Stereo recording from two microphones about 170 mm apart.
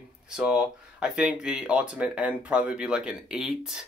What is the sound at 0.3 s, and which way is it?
Speech, 5° right (ahead or behind).